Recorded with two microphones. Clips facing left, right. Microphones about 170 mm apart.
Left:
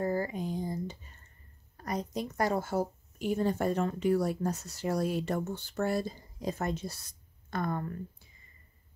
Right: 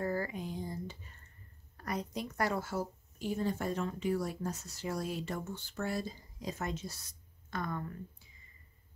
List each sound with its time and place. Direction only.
0.0 s a sound: 25° left (ahead or behind)
2.2 s speech: 20° left (ahead or behind)
2.8 s speech: 60° left (ahead or behind)